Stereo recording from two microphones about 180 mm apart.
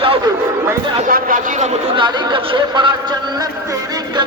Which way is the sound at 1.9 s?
25° right (ahead or behind).